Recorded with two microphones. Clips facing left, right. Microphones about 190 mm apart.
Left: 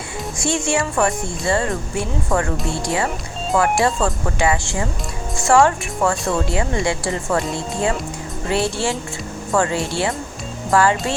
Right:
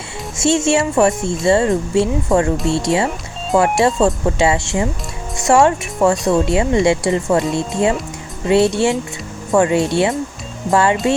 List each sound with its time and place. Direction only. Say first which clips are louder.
0.3 s speech: right 6 dB; 25° right (ahead or behind)